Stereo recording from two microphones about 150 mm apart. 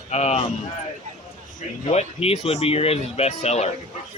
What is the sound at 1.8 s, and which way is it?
Speech, 45° left (ahead or behind).